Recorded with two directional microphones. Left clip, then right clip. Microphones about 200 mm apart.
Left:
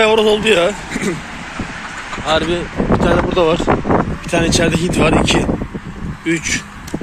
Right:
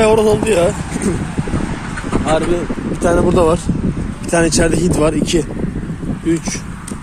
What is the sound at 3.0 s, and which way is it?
Speech, 35° right (ahead or behind).